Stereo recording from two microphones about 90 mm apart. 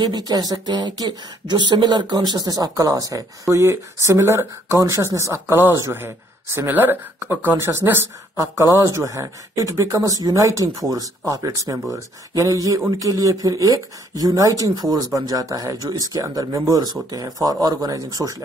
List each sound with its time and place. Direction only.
0.0 s speech: 50° right (ahead or behind)